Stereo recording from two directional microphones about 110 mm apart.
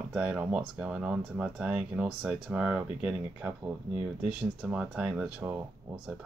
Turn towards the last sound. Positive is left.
turn(degrees=-20)  # may be behind; listen again after turning